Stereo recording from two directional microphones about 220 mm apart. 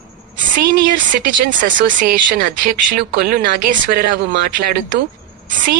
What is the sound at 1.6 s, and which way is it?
A woman's voice, 35° right (ahead or behind).